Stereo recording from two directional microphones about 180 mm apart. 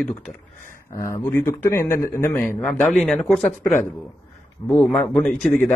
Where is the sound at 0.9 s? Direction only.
15° left (ahead or behind).